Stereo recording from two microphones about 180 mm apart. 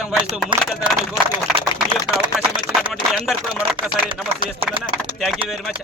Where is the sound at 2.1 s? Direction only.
5° right (ahead or behind).